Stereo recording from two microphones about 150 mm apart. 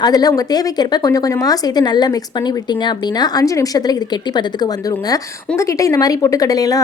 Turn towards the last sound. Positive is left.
turn(degrees=25)  # may be behind; listen again after turning